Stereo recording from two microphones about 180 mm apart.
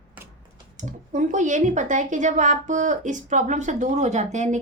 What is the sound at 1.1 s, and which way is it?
A woman's voice, 45° right (ahead or behind).